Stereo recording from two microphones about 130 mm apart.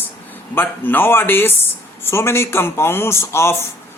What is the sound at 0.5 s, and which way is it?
A man's voice, 15° left (ahead or behind).